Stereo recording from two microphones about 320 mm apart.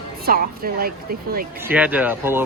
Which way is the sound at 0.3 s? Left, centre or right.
Right.